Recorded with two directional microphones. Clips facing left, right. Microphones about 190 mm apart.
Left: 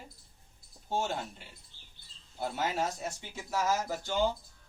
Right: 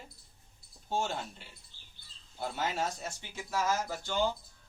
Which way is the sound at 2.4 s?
10° left (ahead or behind).